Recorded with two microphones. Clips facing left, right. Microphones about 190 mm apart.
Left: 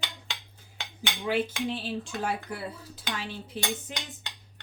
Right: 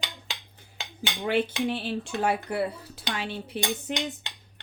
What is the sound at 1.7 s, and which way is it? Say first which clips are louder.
Speech: right 3 dB; 65° right (ahead or behind).